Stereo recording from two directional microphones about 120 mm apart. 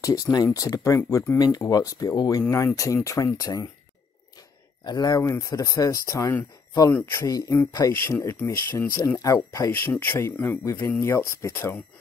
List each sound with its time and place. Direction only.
0.0 s speech: 30° left (ahead or behind)
4.8 s speech: 35° left (ahead or behind)
5.2 s speech: 25° left (ahead or behind)
7.2 s speech: 30° left (ahead or behind)
9.7 s speech: 15° left (ahead or behind)